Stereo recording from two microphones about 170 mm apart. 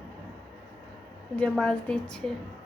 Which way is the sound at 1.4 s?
5° left (ahead or behind).